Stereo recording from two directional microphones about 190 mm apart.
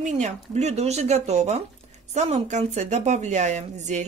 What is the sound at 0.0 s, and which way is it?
Speech, 35° right (ahead or behind).